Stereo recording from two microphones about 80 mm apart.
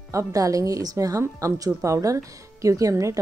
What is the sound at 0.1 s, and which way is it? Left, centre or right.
Speech, right.